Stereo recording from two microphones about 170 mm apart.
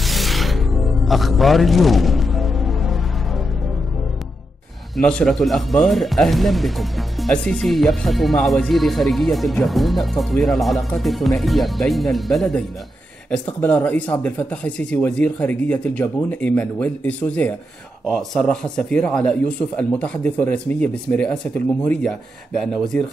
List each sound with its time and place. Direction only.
0.0 s music: centre (ahead or behind)
4.9 s speech: 5° left (ahead or behind)